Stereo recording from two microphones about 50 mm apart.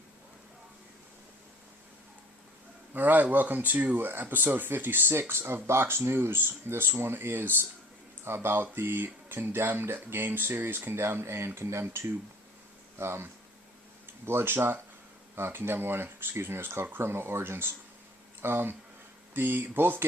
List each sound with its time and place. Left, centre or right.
2.9 s speech: right
13.0 s speech: right
14.3 s speech: right